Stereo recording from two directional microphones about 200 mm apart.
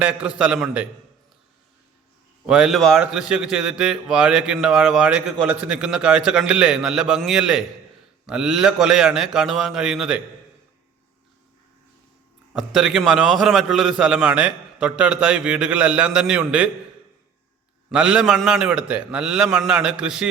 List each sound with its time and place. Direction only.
0.0 s a man's voice: 5° right (ahead or behind)
2.5 s a man's voice: centre (ahead or behind)
12.5 s a man's voice: centre (ahead or behind)
17.8 s a man's voice: 5° right (ahead or behind)